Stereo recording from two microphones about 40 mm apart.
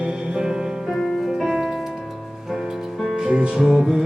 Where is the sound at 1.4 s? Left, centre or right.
Centre.